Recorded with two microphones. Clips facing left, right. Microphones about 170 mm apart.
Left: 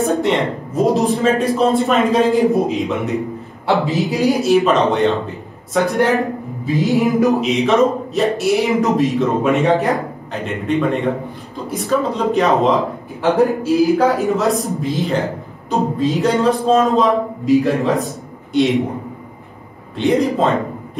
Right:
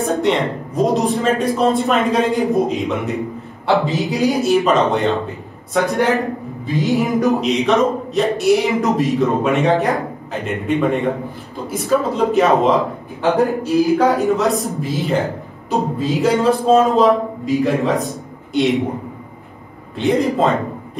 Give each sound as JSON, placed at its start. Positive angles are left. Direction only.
{"t": 0.0, "sound": "a man's voice", "side_deg": 0}
{"t": 20.0, "sound": "a man's voice", "side_deg": 0}